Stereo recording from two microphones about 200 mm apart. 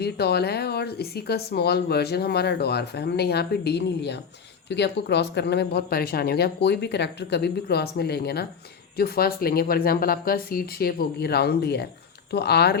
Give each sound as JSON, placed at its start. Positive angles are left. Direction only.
{"t": 0.0, "sound": "speech", "side_deg": 55}